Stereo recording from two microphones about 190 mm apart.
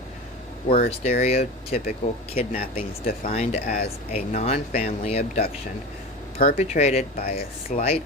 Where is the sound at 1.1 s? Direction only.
35° left (ahead or behind).